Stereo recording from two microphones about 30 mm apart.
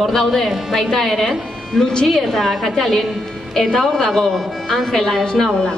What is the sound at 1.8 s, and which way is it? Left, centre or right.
Speech, left.